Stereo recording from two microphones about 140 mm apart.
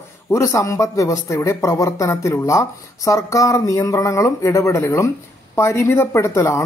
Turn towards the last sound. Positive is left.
turn(degrees=20)  # may be behind; listen again after turning